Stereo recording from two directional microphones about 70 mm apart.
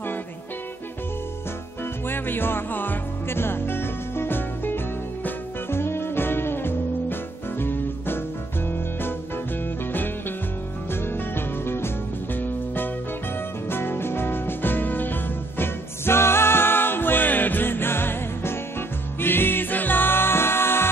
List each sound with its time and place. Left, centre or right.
2.0 s music: left
10.9 s music: left